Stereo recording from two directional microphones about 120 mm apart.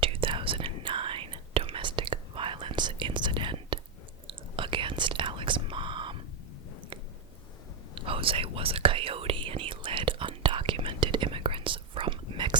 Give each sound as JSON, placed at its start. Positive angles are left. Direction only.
{"t": 0.0, "sound": "whispering", "side_deg": -45}
{"t": 7.9, "sound": "whispering", "side_deg": -50}